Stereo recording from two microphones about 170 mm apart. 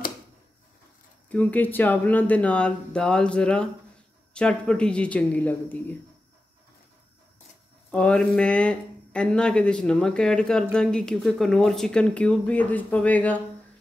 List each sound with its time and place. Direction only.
1.3 s speech: 10° left (ahead or behind)
7.9 s speech: 5° left (ahead or behind)